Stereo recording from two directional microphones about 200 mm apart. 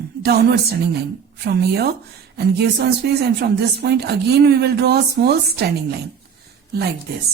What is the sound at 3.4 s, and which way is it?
A woman's voice, 55° right (ahead or behind).